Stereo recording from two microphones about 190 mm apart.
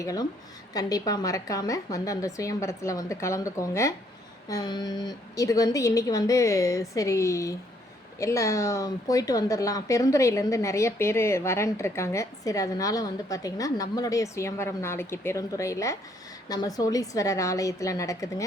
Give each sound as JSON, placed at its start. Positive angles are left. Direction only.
{"t": 0.0, "sound": "a woman's voice", "side_deg": 20}